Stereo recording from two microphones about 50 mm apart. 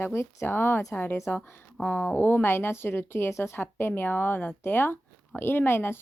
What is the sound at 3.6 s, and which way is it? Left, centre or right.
Speech, left.